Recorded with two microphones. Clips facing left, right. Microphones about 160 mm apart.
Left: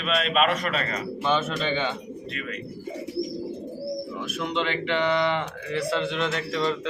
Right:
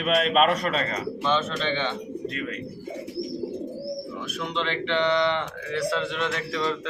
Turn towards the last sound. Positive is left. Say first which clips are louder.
# left 1 dB
turn(degrees=0)  # may be behind; listen again after turning